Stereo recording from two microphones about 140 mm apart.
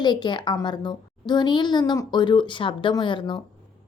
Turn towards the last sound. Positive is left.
turn(degrees=35)  # may be behind; listen again after turning